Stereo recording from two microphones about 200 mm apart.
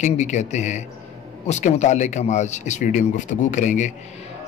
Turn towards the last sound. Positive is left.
turn(degrees=35)  # may be behind; listen again after turning